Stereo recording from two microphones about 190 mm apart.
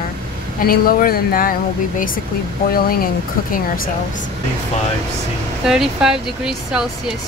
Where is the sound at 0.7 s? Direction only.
50° left (ahead or behind).